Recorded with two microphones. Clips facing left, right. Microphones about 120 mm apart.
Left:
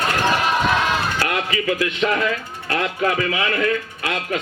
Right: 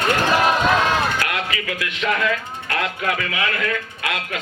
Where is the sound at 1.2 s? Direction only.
30° left (ahead or behind).